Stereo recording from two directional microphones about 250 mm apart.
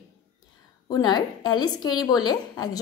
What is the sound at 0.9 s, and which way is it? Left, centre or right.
Speech, centre.